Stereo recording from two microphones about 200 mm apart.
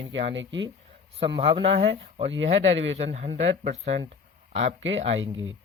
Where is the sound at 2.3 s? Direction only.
70° right (ahead or behind).